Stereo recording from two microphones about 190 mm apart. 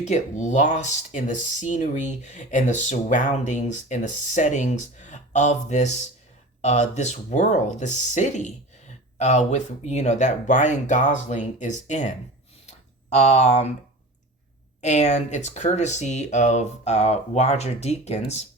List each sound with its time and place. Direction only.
0.0 s speech: 40° left (ahead or behind)
12.6 s a sound: 35° left (ahead or behind)
14.8 s speech: 35° left (ahead or behind)